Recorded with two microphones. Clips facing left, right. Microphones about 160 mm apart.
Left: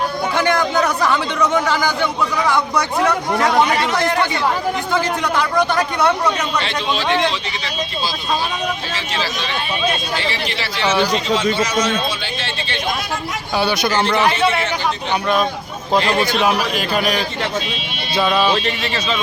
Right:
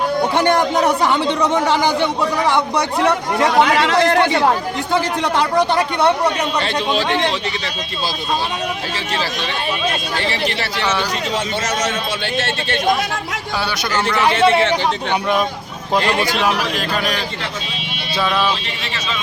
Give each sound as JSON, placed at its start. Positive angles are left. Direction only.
{"t": 0.3, "sound": "a man's voice", "side_deg": -30}
{"t": 4.9, "sound": "a man's voice", "side_deg": -30}
{"t": 10.2, "sound": "speech", "side_deg": -55}
{"t": 13.6, "sound": "speech", "side_deg": 20}
{"t": 14.4, "sound": "a man's voice", "side_deg": -25}
{"t": 15.9, "sound": "a man's voice", "side_deg": -10}
{"t": 16.4, "sound": "speech", "side_deg": 5}